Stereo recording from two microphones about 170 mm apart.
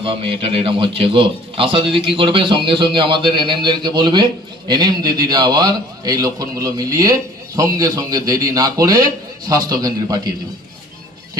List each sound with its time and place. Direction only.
0.0 s a man's voice: 30° right (ahead or behind)